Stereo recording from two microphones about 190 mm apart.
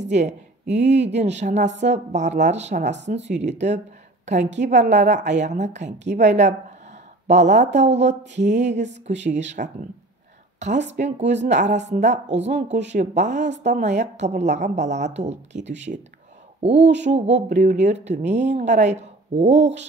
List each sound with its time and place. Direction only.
0.0 s a woman's voice: 35° right (ahead or behind)
11.0 s a woman's voice: 40° right (ahead or behind)
15.5 s speech: 70° right (ahead or behind)
17.0 s a woman's voice: 35° right (ahead or behind)